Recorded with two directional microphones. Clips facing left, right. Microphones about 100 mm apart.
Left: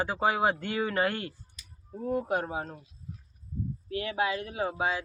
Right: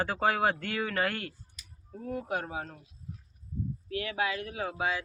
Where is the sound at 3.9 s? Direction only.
25° left (ahead or behind).